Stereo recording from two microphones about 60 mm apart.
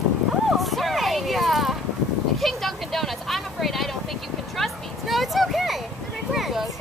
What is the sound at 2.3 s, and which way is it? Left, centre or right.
Vehicle, centre.